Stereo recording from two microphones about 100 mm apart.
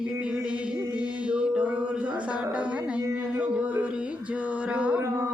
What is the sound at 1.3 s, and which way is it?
Mantra, 10° right (ahead or behind).